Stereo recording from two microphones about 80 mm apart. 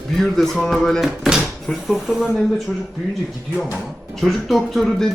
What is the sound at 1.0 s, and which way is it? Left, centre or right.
Speech, centre.